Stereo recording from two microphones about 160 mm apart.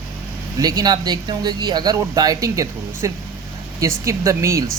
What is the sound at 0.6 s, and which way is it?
Speech, 25° right (ahead or behind).